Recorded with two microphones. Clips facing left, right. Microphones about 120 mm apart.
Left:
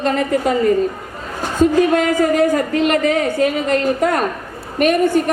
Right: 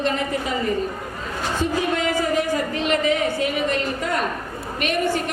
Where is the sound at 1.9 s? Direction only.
50° left (ahead or behind).